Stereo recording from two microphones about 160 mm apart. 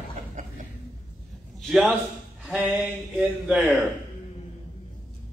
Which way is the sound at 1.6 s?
5° right (ahead or behind).